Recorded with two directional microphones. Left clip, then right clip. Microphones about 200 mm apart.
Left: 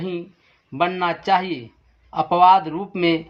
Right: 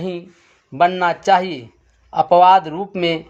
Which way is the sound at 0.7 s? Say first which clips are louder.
Right 5 dB; 40° right (ahead or behind).